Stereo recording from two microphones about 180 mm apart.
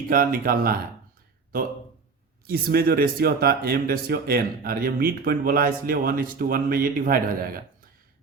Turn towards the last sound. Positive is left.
turn(degrees=-55)  # may be behind; listen again after turning